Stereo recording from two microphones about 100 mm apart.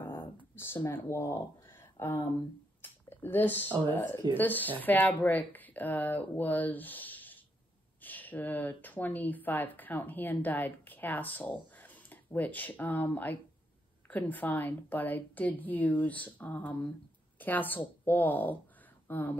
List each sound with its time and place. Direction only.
0.8 s speech: 30° left (ahead or behind)
2.8 s a sound: 20° left (ahead or behind)
3.9 s a woman's voice: 20° left (ahead or behind)